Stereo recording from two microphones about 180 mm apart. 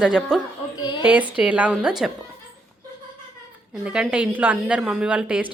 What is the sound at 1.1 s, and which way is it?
A woman's voice, 5° right (ahead or behind).